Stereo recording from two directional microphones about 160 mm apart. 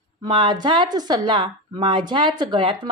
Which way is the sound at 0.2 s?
30° right (ahead or behind).